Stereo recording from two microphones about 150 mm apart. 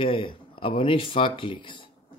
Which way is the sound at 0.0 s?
35° left (ahead or behind).